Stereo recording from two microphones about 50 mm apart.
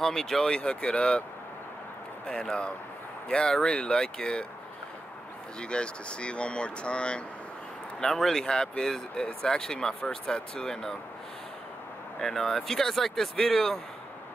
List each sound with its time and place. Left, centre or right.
0.0 s speech: centre
2.2 s speech: centre
5.6 s speech: centre
8.0 s speech: centre
12.2 s speech: centre